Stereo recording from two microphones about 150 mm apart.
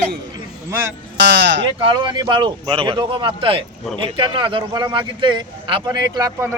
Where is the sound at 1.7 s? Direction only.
35° right (ahead or behind).